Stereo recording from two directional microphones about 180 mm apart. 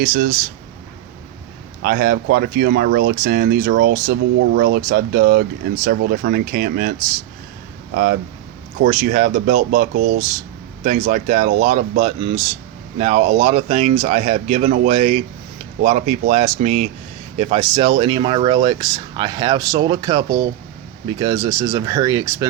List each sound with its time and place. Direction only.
0.0 s speech: 50° right (ahead or behind)
1.8 s speech: 55° right (ahead or behind)
8.8 s speech: 45° right (ahead or behind); by 22.4 s 20° right (ahead or behind)